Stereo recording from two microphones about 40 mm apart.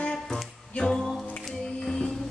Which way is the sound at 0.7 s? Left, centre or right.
Left.